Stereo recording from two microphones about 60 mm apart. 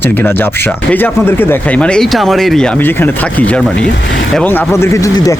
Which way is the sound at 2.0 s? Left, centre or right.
Centre.